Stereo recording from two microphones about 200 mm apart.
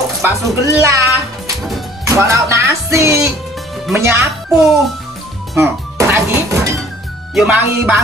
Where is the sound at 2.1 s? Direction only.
15° right (ahead or behind).